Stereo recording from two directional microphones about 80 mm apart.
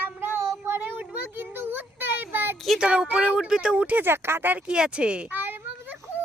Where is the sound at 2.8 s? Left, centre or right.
Centre.